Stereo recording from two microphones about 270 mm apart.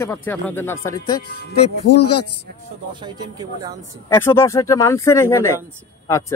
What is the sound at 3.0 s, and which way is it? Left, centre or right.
Speech, centre.